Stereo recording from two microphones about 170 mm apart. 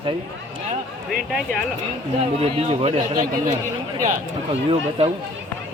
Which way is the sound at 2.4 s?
35° right (ahead or behind).